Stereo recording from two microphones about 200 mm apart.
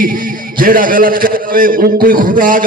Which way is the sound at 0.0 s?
45° right (ahead or behind).